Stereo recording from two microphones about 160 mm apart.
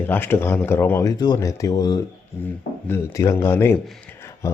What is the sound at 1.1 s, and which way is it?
Speech, 25° left (ahead or behind).